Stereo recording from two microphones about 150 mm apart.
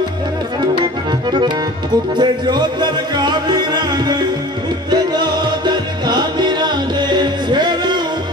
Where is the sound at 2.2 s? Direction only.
30° right (ahead or behind).